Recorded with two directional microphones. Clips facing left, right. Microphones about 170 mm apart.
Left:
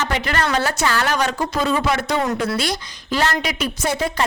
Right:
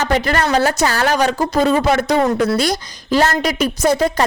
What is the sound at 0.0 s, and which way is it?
A woman's voice, 40° right (ahead or behind).